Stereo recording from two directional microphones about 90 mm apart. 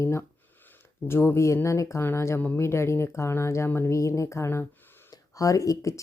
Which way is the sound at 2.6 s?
30° left (ahead or behind).